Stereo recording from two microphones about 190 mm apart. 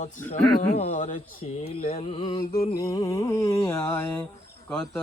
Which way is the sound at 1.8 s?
30° left (ahead or behind).